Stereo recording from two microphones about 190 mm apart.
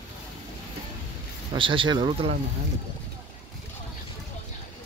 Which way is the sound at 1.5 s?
25° right (ahead or behind).